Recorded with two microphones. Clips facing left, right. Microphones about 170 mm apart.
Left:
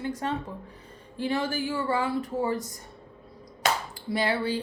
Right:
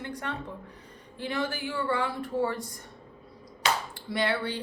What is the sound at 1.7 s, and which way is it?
Speech, 25° left (ahead or behind).